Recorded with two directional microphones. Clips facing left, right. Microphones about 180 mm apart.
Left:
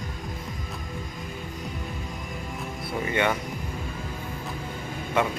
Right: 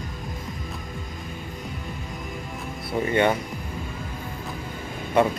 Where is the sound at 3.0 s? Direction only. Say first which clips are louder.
Right 4 dB; 35° right (ahead or behind).